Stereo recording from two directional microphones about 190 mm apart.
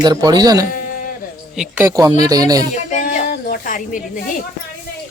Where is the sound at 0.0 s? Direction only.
20° right (ahead or behind).